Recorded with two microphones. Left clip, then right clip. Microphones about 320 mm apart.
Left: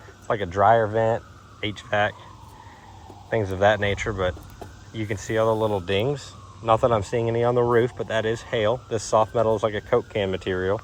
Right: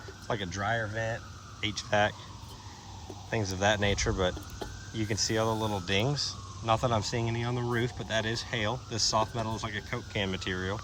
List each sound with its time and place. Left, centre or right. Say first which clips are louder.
0.3 s speech: left 9 dB; centre
1.6 s speech: left 4 dB; centre
3.2 s speech: left 8 dB; centre